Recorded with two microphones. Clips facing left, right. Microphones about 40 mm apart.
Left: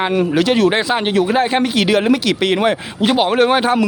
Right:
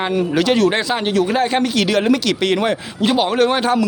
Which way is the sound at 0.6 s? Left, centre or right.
Centre.